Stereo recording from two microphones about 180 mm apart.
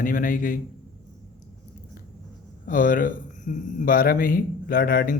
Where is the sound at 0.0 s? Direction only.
50° left (ahead or behind).